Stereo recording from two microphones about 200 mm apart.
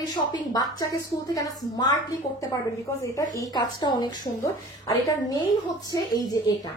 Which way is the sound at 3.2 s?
20° left (ahead or behind).